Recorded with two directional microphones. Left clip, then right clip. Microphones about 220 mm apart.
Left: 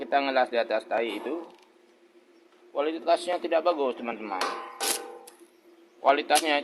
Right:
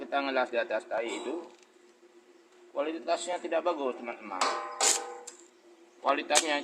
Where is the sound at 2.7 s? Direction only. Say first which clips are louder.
Left 6 dB; 45° left (ahead or behind).